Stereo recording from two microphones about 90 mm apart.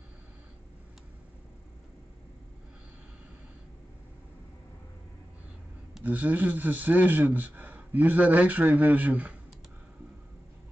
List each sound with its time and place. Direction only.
6.0 s speech: 15° right (ahead or behind)